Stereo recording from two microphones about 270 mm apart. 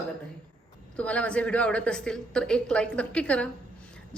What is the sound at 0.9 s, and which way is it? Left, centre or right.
A woman's voice, centre.